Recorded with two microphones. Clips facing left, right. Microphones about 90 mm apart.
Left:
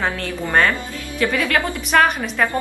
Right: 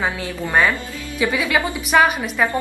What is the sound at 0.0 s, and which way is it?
A woman's voice, 5° right (ahead or behind).